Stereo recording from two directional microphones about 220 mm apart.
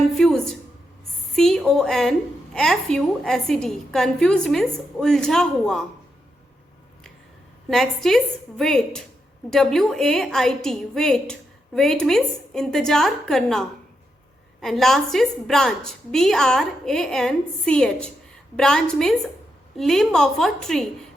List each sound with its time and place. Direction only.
0.1 s a sound: centre (ahead or behind)
1.4 s a woman's voice: centre (ahead or behind)
7.7 s a woman's voice: centre (ahead or behind)